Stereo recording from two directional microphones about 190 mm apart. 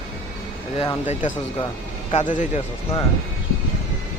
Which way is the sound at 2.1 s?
40° left (ahead or behind).